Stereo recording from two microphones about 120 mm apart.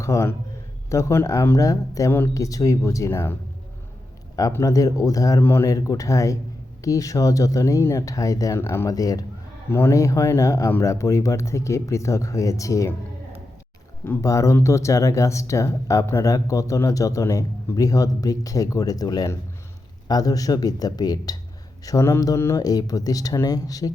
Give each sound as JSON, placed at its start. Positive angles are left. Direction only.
{"t": 0.0, "sound": "speech", "side_deg": 25}
{"t": 4.4, "sound": "speech", "side_deg": 30}
{"t": 9.6, "sound": "speech", "side_deg": 20}
{"t": 14.0, "sound": "speech", "side_deg": 25}